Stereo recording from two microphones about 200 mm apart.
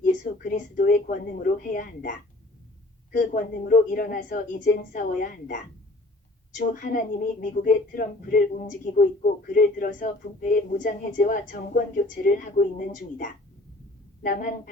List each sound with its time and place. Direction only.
0.0 s a woman's voice: 40° left (ahead or behind)